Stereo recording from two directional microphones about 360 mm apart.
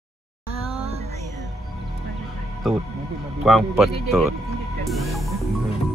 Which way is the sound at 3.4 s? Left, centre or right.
Centre.